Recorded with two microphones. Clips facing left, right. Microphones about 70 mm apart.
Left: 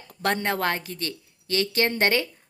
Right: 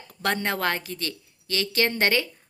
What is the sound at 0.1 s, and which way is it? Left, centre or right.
A woman's voice, left.